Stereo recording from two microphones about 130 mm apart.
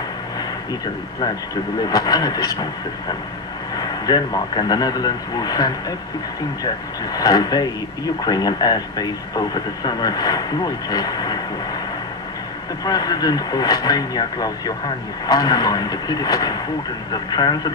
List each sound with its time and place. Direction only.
1.2 s speech: 30° left (ahead or behind)
7.2 s speech: 30° left (ahead or behind)
12.8 s speech: 30° left (ahead or behind)